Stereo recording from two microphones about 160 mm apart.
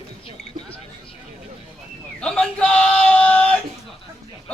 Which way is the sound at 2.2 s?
5° left (ahead or behind).